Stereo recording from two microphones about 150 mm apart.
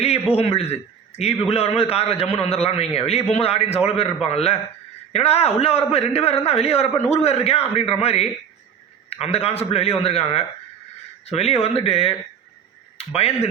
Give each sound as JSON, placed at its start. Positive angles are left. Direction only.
{"t": 0.3, "sound": "a man's voice", "side_deg": 40}
{"t": 13.1, "sound": "a man's voice", "side_deg": 40}